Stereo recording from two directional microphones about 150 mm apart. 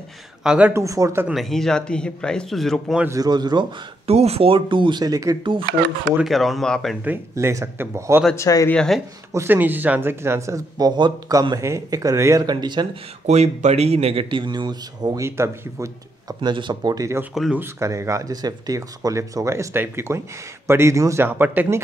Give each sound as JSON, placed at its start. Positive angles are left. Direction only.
{"t": 0.4, "sound": "speech", "side_deg": -5}
{"t": 0.8, "sound": "speech", "side_deg": -20}
{"t": 1.2, "sound": "speech", "side_deg": 0}
{"t": 3.1, "sound": "speech", "side_deg": -25}
{"t": 4.1, "sound": "speech", "side_deg": -45}
{"t": 6.1, "sound": "speech", "side_deg": 0}
{"t": 7.1, "sound": "speech", "side_deg": -20}
{"t": 8.4, "sound": "speech", "side_deg": 25}
{"t": 8.6, "sound": "speech", "side_deg": 5}
{"t": 9.3, "sound": "speech", "side_deg": -15}
{"t": 13.3, "sound": "speech", "side_deg": -50}
{"t": 16.3, "sound": "speech", "side_deg": -30}
{"t": 17.3, "sound": "speech", "side_deg": 0}
{"t": 17.6, "sound": "speech", "side_deg": -20}